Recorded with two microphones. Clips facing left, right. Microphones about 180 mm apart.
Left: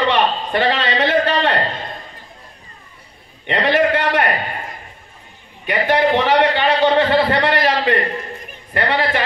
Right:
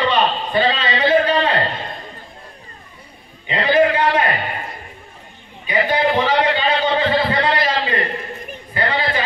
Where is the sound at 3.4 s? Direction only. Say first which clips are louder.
Right 1 dB; 70° left (ahead or behind).